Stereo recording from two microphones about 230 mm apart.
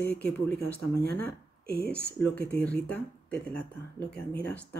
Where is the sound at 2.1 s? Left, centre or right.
Centre.